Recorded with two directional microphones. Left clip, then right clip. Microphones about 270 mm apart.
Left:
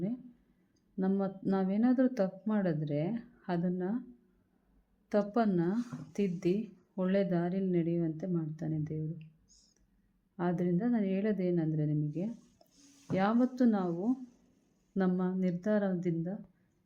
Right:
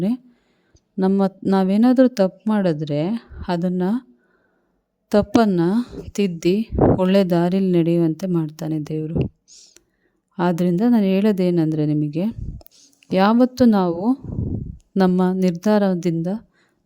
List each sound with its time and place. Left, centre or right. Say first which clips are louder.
0.9 s a woman's voice: right 14 dB; right
5.0 s a woman's voice: right 14 dB; right